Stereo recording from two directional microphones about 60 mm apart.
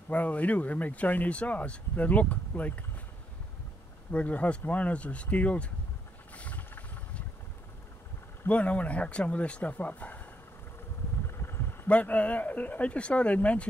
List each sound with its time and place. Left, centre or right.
0.1 s speech: left
4.1 s speech: left
6.3 s a sound: left
8.5 s speech: left
11.2 s a sound: left
11.9 s speech: left